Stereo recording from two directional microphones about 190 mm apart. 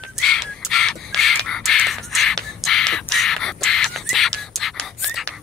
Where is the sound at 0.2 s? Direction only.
Centre (ahead or behind).